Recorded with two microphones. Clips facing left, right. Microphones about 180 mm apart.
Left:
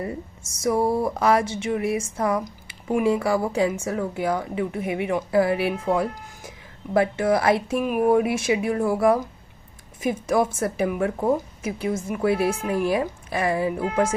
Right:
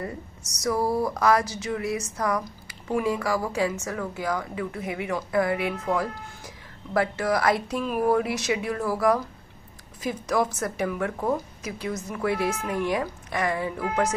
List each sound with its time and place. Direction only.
0.6 s a woman's voice: 25° left (ahead or behind)